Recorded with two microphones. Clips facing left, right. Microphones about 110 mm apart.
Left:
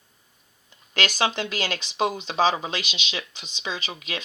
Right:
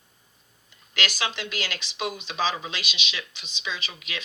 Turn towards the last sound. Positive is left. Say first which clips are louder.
# left 3 dB
turn(degrees=45)  # may be behind; listen again after turning